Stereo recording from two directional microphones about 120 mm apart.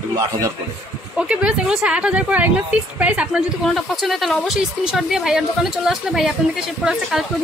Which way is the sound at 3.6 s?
Centre (ahead or behind).